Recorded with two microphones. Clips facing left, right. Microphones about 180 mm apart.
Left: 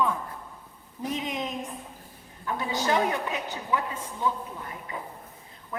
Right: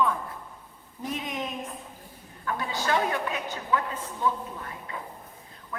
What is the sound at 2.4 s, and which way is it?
Speech, 20° left (ahead or behind).